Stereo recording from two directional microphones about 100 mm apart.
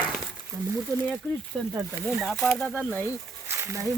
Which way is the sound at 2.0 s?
Centre (ahead or behind).